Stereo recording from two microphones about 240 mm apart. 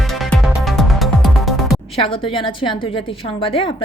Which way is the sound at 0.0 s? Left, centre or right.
Centre.